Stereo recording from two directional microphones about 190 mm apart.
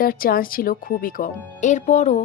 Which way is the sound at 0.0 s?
50° left (ahead or behind).